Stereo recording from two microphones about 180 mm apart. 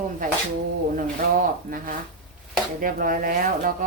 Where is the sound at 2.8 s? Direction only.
50° right (ahead or behind).